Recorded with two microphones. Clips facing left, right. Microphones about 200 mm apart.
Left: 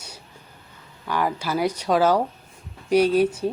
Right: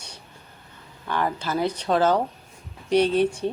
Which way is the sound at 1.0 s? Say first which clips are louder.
Left 1 dB; 10° left (ahead or behind).